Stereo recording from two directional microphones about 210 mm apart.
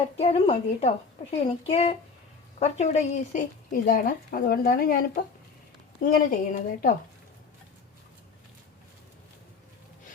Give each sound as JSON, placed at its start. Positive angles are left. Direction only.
{"t": 0.2, "sound": "a woman's voice", "side_deg": 30}